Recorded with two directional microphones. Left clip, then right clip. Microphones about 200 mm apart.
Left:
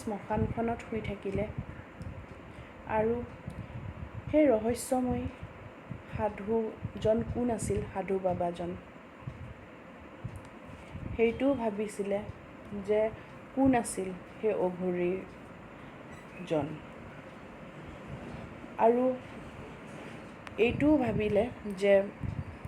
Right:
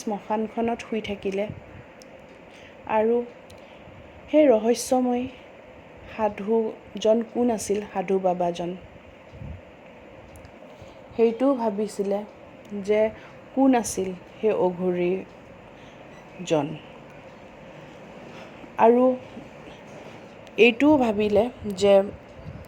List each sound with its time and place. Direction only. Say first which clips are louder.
0.0 s speech: right 6 dB; 45° right (ahead or behind)
2.9 s speech: right 8 dB; 45° right (ahead or behind)
4.3 s speech: right 8 dB; 40° right (ahead or behind)
11.2 s speech: right 7 dB; 35° right (ahead or behind)
12.8 s speech: right 7 dB; 50° right (ahead or behind)
13.6 s speech: right 7 dB; 40° right (ahead or behind)
16.4 s speech: right 8 dB; 45° right (ahead or behind)
18.8 s speech: right 8 dB; 45° right (ahead or behind)
20.6 s speech: right 9 dB; 45° right (ahead or behind)